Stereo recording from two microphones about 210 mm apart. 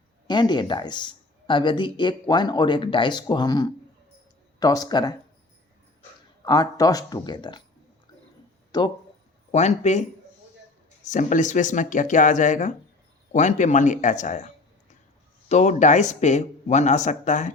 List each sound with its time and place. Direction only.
0.3 s speech: 20° left (ahead or behind)
6.4 s speech: 20° left (ahead or behind)
8.7 s speech: 20° left (ahead or behind)
9.5 s speech: 35° left (ahead or behind)
11.1 s speech: 35° left (ahead or behind)